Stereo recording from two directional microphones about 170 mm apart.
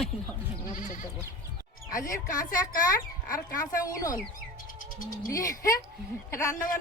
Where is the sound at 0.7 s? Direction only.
50° left (ahead or behind).